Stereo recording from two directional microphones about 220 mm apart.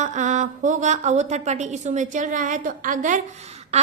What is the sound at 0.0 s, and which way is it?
A woman's voice, 35° right (ahead or behind).